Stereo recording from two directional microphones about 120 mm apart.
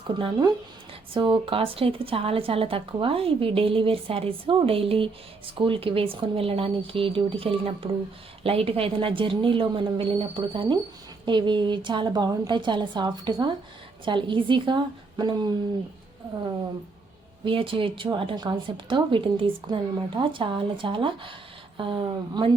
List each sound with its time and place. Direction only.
0.2 s a woman's voice: 40° right (ahead or behind)
17.4 s a woman's voice: 45° right (ahead or behind)